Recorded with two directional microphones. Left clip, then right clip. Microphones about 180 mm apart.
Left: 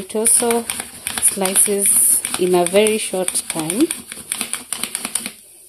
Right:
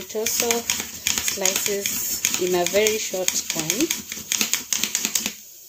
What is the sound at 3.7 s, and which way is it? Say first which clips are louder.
Typewriter: left 7 dB; 20° left (ahead or behind).